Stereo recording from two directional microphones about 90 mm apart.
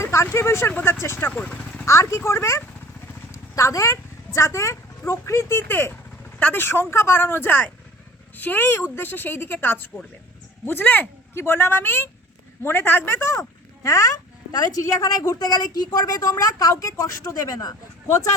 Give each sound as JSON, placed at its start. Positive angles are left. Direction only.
{"t": 0.0, "sound": "speech", "side_deg": 30}
{"t": 0.7, "sound": "speech", "side_deg": 20}
{"t": 1.8, "sound": "a child's voice", "side_deg": 35}
{"t": 13.2, "sound": "a child's voice", "side_deg": 30}